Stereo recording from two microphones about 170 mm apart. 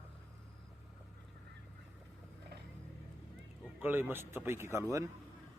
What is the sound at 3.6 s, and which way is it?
Speech, 10° right (ahead or behind).